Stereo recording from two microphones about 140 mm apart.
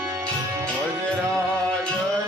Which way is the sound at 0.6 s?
5° left (ahead or behind).